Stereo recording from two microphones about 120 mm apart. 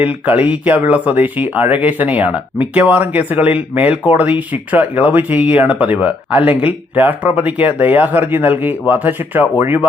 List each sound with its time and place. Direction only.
0.0 s speech: 10° right (ahead or behind)